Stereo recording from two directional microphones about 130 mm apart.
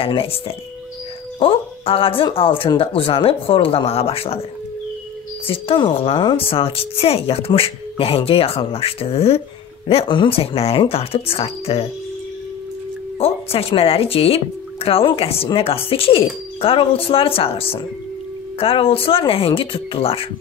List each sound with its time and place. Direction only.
0.0 s speech: 45° left (ahead or behind)
5.5 s speech: 45° left (ahead or behind)
13.2 s speech: 50° left (ahead or behind)